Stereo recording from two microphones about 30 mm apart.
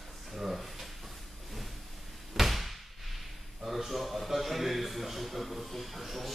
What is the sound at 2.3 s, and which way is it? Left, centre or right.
Slam, centre.